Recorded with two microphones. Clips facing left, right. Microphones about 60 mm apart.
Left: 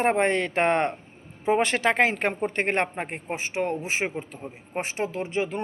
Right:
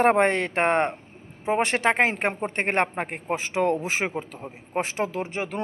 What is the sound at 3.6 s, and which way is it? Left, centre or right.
Speech, right.